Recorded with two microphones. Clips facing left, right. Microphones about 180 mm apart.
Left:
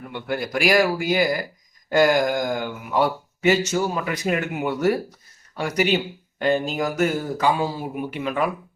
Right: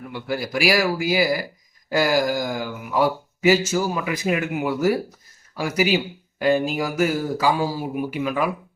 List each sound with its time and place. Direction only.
0.1 s speech: 5° right (ahead or behind)